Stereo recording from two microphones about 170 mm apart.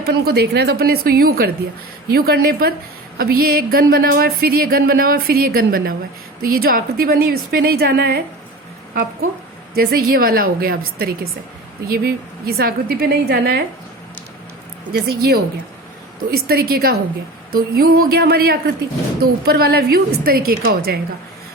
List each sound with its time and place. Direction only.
0.0 s speech: 70° right (ahead or behind)
9.7 s speech: 65° right (ahead or behind)
14.9 s a woman's voice: 70° right (ahead or behind)